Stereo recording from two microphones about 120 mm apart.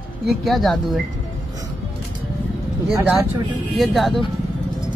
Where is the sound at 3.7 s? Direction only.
Centre (ahead or behind).